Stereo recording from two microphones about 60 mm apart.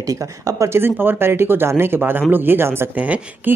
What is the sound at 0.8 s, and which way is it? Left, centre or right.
Speech, right.